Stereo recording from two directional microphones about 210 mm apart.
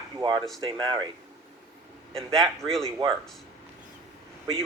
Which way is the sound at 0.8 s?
20° right (ahead or behind).